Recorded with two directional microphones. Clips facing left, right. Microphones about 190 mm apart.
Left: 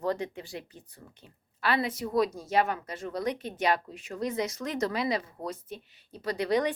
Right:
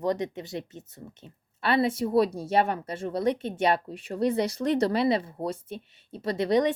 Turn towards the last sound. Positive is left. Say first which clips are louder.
# right 4 dB
turn(degrees=-25)  # may be behind; listen again after turning